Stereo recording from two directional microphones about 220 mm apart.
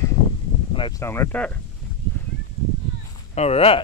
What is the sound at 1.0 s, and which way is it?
Speech, 10° left (ahead or behind).